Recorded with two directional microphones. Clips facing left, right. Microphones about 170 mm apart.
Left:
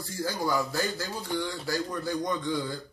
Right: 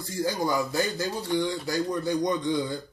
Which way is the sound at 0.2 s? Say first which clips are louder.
Right 2 dB; 20° right (ahead or behind).